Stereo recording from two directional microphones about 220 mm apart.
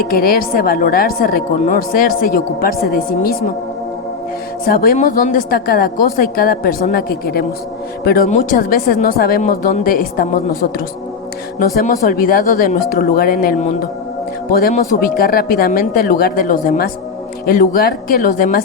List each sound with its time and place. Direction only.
0.1 s a woman's voice: 40° left (ahead or behind)
4.6 s a woman's voice: 40° left (ahead or behind)